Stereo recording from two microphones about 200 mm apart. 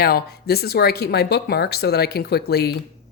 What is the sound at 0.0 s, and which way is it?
Speech, 50° left (ahead or behind).